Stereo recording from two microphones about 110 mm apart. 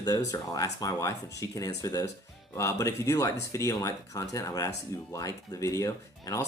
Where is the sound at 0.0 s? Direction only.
35° left (ahead or behind).